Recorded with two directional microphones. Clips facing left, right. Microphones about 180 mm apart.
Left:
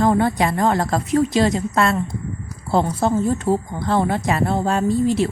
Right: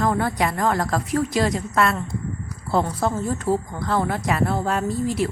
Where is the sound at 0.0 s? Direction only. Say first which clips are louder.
Left 4 dB; 25° left (ahead or behind).